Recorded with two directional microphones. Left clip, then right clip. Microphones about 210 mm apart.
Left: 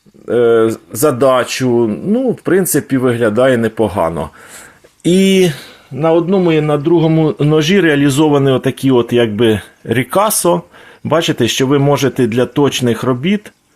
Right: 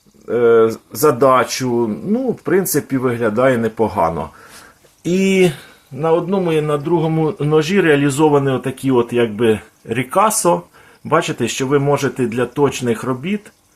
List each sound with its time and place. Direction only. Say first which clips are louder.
0.3 s speech: left 2 dB; 30° left (ahead or behind)
5.1 s a man's voice: left 3 dB; 40° left (ahead or behind)